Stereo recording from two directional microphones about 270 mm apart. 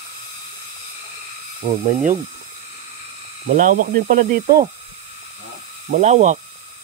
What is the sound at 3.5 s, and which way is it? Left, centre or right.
Speech, right.